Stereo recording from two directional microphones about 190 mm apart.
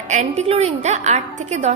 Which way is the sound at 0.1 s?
35° right (ahead or behind).